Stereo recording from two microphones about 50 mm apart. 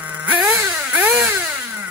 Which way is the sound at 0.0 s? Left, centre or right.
Right.